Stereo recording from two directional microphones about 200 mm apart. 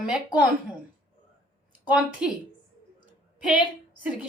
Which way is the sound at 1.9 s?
5° right (ahead or behind).